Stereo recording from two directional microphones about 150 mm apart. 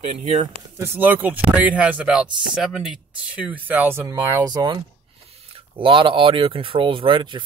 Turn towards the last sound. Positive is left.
turn(degrees=-30)  # may be behind; listen again after turning